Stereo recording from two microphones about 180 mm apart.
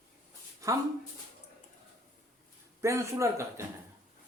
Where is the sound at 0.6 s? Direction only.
15° right (ahead or behind).